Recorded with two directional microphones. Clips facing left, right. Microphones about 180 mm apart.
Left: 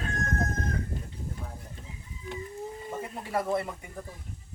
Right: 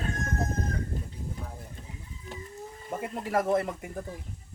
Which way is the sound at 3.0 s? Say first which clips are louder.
Right 4 dB; 50° right (ahead or behind).